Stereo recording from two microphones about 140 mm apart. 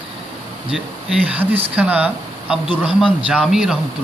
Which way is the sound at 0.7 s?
5° right (ahead or behind).